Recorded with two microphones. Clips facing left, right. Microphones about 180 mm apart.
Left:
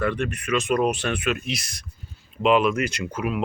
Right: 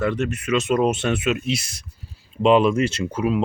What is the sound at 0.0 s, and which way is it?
Speech, 25° right (ahead or behind).